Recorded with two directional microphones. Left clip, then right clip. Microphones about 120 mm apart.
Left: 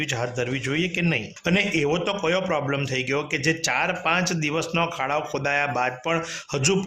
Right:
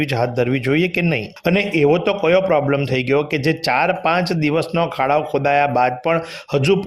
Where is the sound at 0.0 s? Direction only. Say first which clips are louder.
Right 8 dB; 40° right (ahead or behind).